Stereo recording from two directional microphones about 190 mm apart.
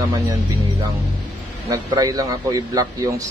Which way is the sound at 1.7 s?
20° right (ahead or behind).